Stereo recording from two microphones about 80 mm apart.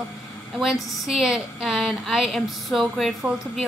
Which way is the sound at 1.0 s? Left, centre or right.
Centre.